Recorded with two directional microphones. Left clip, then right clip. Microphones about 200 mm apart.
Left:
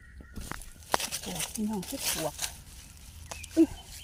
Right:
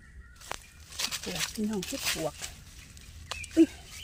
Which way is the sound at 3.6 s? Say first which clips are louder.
Right 1 dB; 15° right (ahead or behind).